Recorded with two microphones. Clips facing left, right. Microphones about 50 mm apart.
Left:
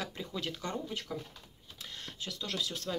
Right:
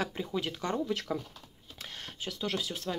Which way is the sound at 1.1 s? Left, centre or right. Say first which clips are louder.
Right 5 dB; right.